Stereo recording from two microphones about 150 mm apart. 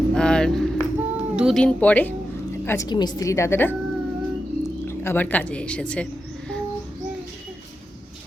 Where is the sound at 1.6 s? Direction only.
5° left (ahead or behind).